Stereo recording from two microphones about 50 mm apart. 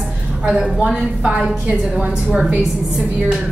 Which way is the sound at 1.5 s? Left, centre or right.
Centre.